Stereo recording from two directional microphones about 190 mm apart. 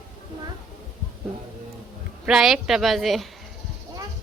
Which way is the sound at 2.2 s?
5° right (ahead or behind).